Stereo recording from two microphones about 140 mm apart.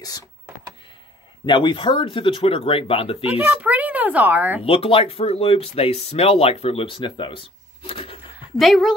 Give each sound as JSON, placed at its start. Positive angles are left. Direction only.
{"t": 1.4, "sound": "speech", "side_deg": 35}
{"t": 3.3, "sound": "a child's voice", "side_deg": -15}
{"t": 4.6, "sound": "speech", "side_deg": 40}
{"t": 8.5, "sound": "speech", "side_deg": 0}